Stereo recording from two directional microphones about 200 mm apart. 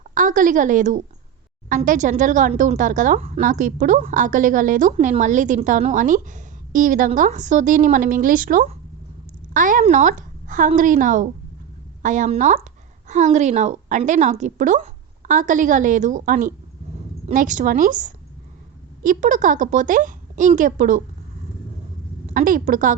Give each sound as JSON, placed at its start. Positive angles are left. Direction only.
{"t": 0.0, "sound": "a woman's voice", "side_deg": -40}
{"t": 3.4, "sound": "a woman's voice", "side_deg": -40}
{"t": 22.3, "sound": "a woman's voice", "side_deg": -40}